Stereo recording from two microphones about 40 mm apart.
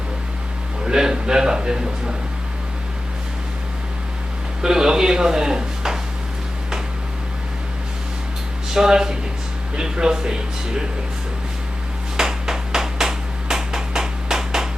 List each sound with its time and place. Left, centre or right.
0.9 s a man's voice: centre
4.6 s speech: centre
8.7 s a man's voice: centre
12.1 s a sound: centre